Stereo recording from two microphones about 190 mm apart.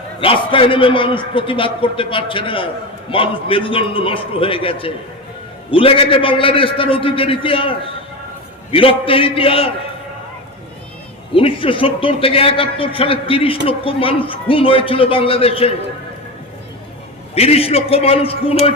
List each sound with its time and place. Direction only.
0.2 s a man's voice: 30° left (ahead or behind)
11.3 s a man's voice: 30° left (ahead or behind)
17.3 s a man's voice: 30° left (ahead or behind)